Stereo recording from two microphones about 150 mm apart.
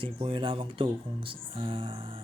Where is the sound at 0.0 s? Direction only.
35° right (ahead or behind).